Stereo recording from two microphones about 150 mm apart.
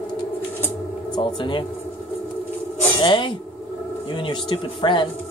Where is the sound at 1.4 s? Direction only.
30° left (ahead or behind).